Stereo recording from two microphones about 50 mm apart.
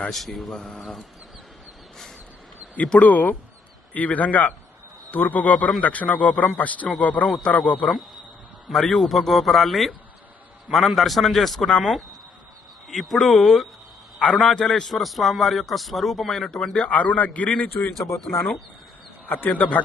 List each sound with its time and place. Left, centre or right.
0.1 s a man's voice: centre
0.5 s a man's voice: centre
2.7 s a man's voice: left
8.8 s a man's voice: centre
16.9 s a man's voice: left
18.2 s a man's voice: centre
19.5 s a man's voice: left